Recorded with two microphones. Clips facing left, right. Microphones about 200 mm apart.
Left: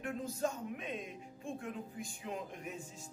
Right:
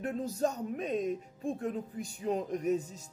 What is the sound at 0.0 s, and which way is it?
Music, 40° right (ahead or behind).